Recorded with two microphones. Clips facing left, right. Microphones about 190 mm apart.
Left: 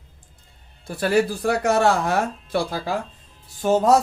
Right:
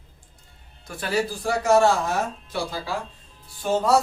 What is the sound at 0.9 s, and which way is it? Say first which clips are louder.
Speech: left 8 dB; 40° left (ahead or behind).